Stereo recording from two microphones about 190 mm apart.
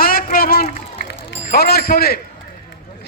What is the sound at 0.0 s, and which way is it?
Run, 50° left (ahead or behind).